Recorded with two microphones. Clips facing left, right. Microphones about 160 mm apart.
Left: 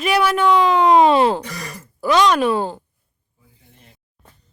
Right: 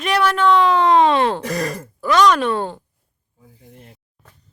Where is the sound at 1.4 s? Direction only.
90° right.